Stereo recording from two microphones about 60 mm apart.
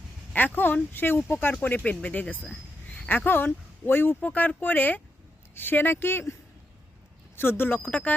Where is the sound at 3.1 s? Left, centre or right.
Left.